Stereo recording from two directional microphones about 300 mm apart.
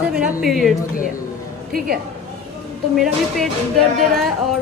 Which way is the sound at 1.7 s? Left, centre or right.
Right.